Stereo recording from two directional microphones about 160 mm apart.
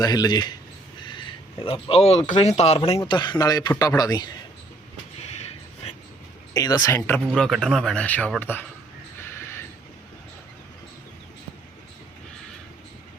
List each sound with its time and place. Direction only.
0.0 s speech: 25° left (ahead or behind)
1.6 s speech: 35° left (ahead or behind)
3.1 s speech: 30° left (ahead or behind)
6.5 s speech: 25° left (ahead or behind)
7.3 s speech: centre (ahead or behind)
9.3 s mechanisms: 15° left (ahead or behind)